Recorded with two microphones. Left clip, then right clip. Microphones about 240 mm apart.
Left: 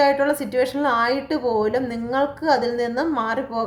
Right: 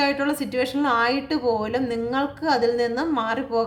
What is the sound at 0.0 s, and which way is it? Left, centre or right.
A woman's voice, right.